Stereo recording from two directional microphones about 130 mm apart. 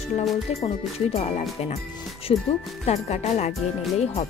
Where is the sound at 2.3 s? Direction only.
50° left (ahead or behind).